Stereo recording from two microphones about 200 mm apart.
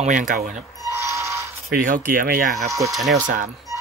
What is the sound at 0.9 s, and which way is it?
Ratchet, 15° right (ahead or behind).